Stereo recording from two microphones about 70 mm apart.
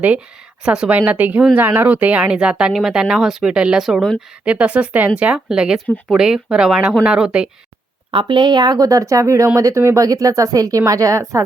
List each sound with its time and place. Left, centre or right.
0.6 s speech: centre
4.4 s speech: centre
8.4 s speech: right